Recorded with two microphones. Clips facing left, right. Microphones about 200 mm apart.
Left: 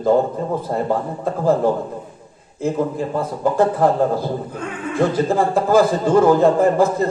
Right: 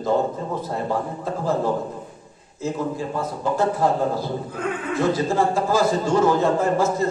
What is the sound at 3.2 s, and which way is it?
A man's voice, 55° left (ahead or behind).